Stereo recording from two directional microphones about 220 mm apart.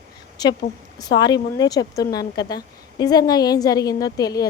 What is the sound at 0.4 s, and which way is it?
Speech, 15° left (ahead or behind).